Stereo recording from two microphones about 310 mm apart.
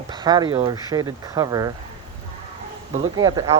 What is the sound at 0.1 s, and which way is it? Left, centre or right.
Speech, centre.